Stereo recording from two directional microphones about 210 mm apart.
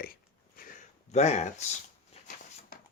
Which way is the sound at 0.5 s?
40° left (ahead or behind).